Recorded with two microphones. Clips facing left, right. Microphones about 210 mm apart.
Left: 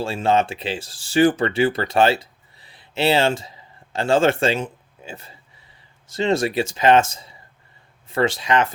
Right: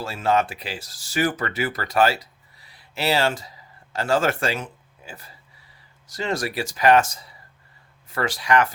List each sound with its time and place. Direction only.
0.0 s speech: 25° left (ahead or behind)